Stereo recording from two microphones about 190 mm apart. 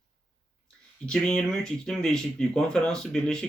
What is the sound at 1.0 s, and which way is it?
Speech, 5° left (ahead or behind).